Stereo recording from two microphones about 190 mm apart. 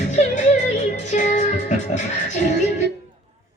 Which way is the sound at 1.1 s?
40° left (ahead or behind).